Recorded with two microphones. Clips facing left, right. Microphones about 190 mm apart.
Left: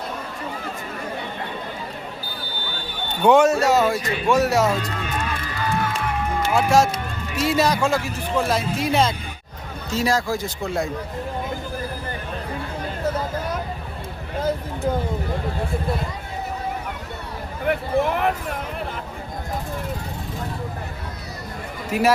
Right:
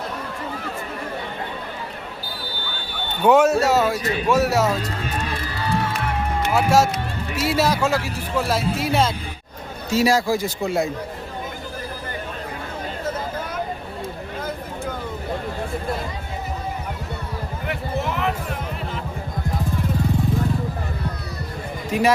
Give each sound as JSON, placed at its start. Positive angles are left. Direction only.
{"t": 3.2, "sound": "speech", "side_deg": -5}
{"t": 6.5, "sound": "a man's voice", "side_deg": -5}
{"t": 17.7, "sound": "music", "side_deg": 50}
{"t": 21.8, "sound": "speech", "side_deg": 5}